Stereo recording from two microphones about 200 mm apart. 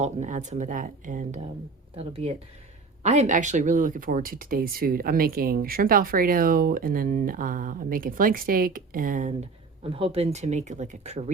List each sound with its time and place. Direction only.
0.0 s speech: 40° right (ahead or behind)
2.0 s speech: 30° right (ahead or behind)